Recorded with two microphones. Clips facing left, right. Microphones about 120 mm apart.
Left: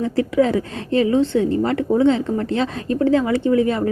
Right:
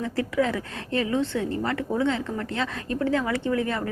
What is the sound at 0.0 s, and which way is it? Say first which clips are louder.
A woman's voice: left 7 dB; 25° left (ahead or behind).